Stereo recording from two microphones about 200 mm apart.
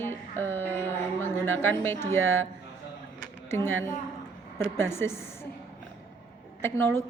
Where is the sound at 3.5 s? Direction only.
10° left (ahead or behind).